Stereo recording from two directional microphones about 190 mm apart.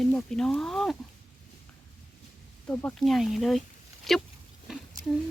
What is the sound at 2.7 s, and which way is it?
Speech, 10° left (ahead or behind).